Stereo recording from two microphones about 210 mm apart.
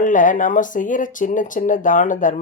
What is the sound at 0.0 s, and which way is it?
Speech, 40° left (ahead or behind).